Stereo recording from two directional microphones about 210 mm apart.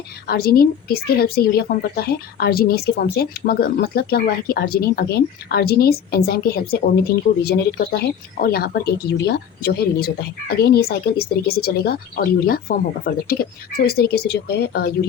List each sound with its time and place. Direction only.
0.3 s a woman's voice: 45° left (ahead or behind)